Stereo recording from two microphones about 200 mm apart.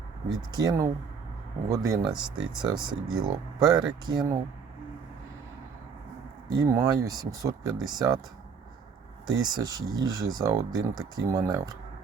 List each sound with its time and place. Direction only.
0.5 s speech: 20° right (ahead or behind)
6.5 s speech: 15° right (ahead or behind)
9.3 s speech: 20° right (ahead or behind)